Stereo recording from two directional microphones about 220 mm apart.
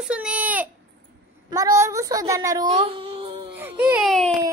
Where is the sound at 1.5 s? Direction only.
15° right (ahead or behind).